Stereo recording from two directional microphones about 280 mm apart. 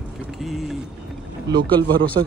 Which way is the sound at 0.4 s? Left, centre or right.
Centre.